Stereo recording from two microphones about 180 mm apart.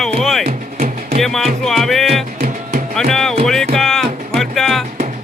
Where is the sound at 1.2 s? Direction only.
Centre (ahead or behind).